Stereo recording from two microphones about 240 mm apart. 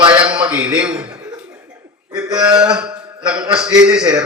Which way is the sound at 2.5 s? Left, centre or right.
Centre.